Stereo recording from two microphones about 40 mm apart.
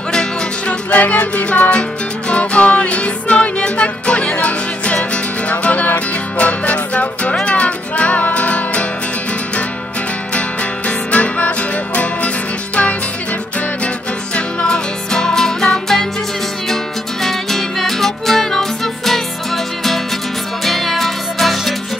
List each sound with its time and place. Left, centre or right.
0.1 s music: centre
0.8 s music: left
10.9 s music: left
14.3 s music: left; by 21.7 s centre